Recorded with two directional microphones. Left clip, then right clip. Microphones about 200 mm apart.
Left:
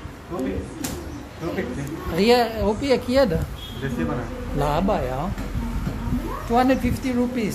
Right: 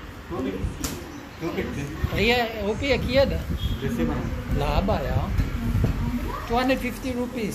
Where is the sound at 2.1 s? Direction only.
30° left (ahead or behind).